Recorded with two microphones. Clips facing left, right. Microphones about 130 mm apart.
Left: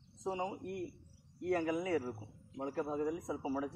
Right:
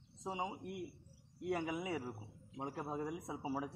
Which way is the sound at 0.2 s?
5° right (ahead or behind).